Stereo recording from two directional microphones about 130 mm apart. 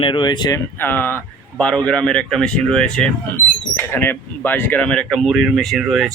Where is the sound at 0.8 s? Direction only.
15° left (ahead or behind).